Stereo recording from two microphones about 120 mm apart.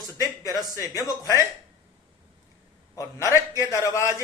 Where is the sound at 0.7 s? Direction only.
30° left (ahead or behind).